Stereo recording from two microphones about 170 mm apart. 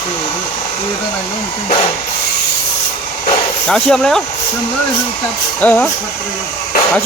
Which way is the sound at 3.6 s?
5° left (ahead or behind).